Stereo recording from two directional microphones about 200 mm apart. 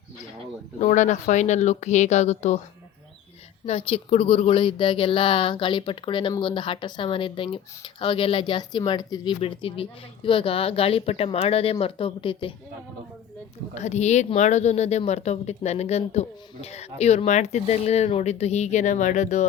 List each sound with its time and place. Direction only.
0.8 s speech: 35° left (ahead or behind)
3.7 s speech: 30° left (ahead or behind)
13.7 s speech: 35° left (ahead or behind)